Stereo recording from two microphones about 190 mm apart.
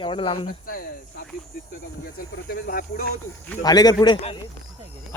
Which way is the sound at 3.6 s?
20° left (ahead or behind).